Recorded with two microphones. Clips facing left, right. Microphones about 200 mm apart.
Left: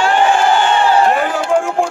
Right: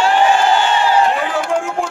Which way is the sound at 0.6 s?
50° left (ahead or behind).